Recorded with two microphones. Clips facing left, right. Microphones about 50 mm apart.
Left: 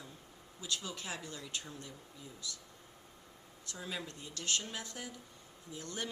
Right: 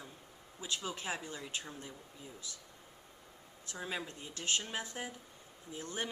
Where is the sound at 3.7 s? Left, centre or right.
Right.